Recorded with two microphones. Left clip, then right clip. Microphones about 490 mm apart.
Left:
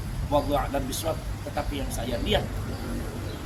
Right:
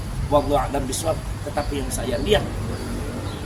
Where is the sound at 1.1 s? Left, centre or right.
Left.